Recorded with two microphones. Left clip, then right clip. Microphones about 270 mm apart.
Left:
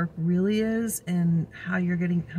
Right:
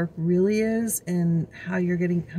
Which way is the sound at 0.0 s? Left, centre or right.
Centre.